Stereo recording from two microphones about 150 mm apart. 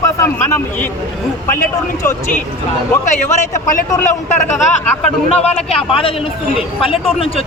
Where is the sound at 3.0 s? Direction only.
55° left (ahead or behind).